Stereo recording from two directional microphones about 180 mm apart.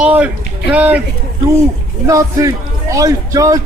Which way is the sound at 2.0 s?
15° right (ahead or behind).